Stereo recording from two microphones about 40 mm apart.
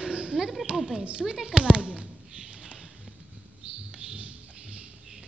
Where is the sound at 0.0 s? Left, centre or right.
Right.